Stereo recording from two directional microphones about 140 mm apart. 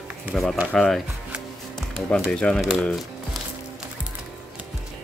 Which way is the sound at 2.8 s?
Centre (ahead or behind).